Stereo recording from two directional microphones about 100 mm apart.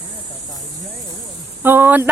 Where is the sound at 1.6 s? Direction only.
20° right (ahead or behind).